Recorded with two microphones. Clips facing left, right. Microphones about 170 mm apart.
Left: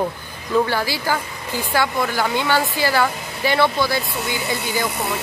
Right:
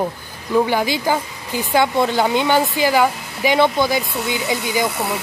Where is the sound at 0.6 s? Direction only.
15° right (ahead or behind).